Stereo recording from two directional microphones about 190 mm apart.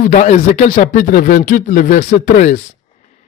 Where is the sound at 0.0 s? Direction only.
40° left (ahead or behind).